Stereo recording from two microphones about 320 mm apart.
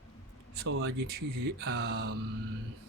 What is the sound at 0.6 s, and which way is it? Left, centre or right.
Mantra, right.